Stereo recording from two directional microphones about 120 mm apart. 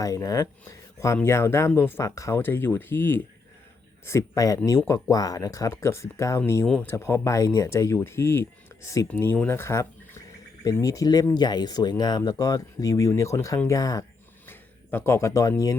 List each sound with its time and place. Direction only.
0.0 s speech: 30° left (ahead or behind)
14.4 s speech: 15° left (ahead or behind)